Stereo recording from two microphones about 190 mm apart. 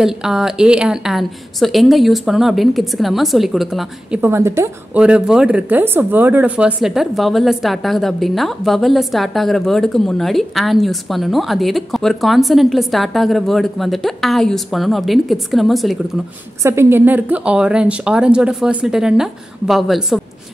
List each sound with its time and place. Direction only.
0.0 s speech: 5° right (ahead or behind)
4.2 s speech: 15° right (ahead or behind)
16.6 s speech: 15° right (ahead or behind)